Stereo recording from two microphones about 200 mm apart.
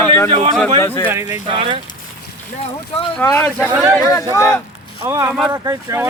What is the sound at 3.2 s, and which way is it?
Speech, 10° left (ahead or behind).